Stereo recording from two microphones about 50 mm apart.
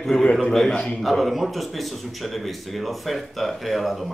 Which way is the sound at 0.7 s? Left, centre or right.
Centre.